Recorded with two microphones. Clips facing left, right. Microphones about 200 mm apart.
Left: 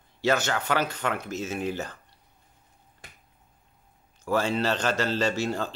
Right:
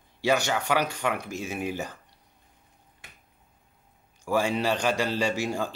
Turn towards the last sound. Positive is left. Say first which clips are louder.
# left 1 dB
turn(degrees=-10)  # may be behind; listen again after turning